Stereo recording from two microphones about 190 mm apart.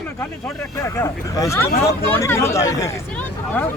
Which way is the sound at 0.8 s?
15° left (ahead or behind).